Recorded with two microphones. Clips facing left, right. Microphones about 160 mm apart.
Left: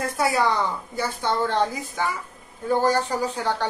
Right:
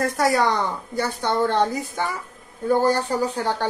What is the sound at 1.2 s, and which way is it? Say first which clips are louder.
Speech: right 2 dB; 50° right (ahead or behind).